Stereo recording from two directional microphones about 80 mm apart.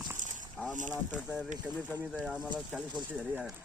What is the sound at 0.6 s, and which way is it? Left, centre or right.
Speech, centre.